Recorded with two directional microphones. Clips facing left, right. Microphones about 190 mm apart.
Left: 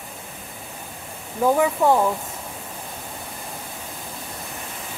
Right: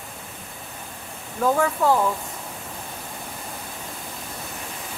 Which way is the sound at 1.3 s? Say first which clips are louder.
Left 2 dB; 15° left (ahead or behind).